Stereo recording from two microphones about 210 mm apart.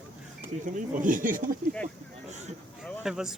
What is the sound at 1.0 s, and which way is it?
Speech, 40° right (ahead or behind).